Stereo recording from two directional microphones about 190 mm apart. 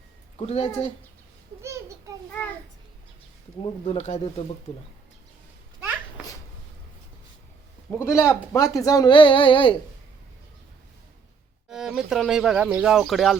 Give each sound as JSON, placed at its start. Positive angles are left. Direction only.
{"t": 0.3, "sound": "speech", "side_deg": 35}
{"t": 3.6, "sound": "speech", "side_deg": 30}
{"t": 7.9, "sound": "speech", "side_deg": 15}
{"t": 11.7, "sound": "speech", "side_deg": -5}